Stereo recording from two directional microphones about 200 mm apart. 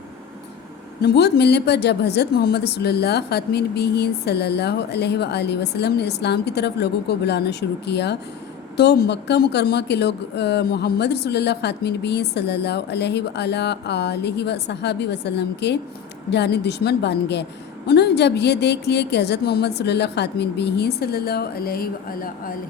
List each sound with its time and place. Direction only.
1.0 s a woman's voice: 55° left (ahead or behind)